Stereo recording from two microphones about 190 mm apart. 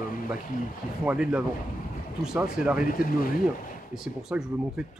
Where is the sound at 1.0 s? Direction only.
5° right (ahead or behind).